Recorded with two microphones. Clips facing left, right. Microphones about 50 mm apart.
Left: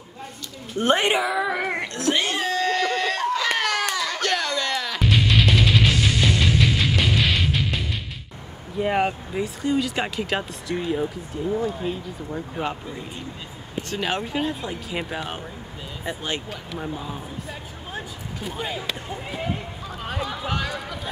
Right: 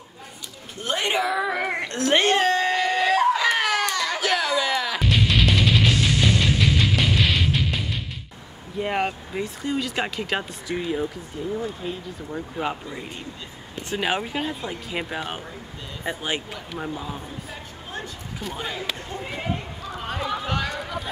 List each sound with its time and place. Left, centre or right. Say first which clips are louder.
0.7 s a woman's voice: left 7 dB; left
1.2 s speech: even; centre
2.0 s a child's voice: right 6 dB; right
2.6 s baby cry: right 1 dB; centre
4.1 s music: right 2 dB; centre
8.7 s speech: left 3 dB; centre
13.8 s speech: right 2 dB; centre
16.9 s speech: even; centre
17.9 s a sound: even; centre
19.9 s run: right 2 dB; centre